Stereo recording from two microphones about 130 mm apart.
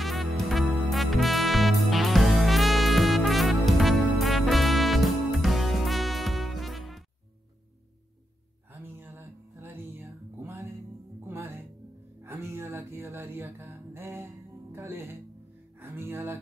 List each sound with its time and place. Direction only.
0.0 s music: centre (ahead or behind)
9.0 s music: 20° right (ahead or behind)